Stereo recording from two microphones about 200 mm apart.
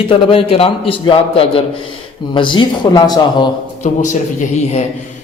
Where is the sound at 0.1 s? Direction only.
25° left (ahead or behind).